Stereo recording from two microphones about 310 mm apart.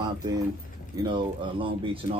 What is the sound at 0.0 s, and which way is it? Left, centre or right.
A man's voice, centre.